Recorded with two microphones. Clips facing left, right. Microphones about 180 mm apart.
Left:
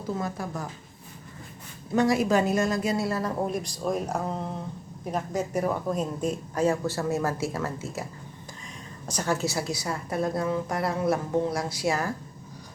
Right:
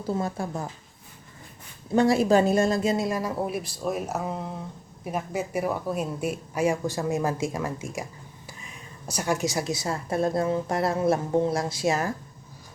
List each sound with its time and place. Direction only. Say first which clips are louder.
0.1 s a woman's voice: right 3 dB; 30° right (ahead or behind)
1.9 s speech: right 3 dB; 30° right (ahead or behind)
9.0 s a woman's voice: right 1 dB; 10° right (ahead or behind)